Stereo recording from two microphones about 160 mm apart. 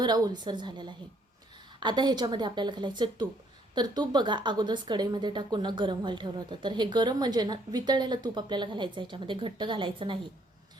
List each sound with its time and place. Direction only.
0.0 s a woman's voice: 25° right (ahead or behind)